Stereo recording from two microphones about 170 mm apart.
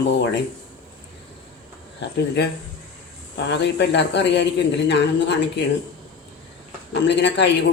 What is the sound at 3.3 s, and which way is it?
A man's voice, 90° left.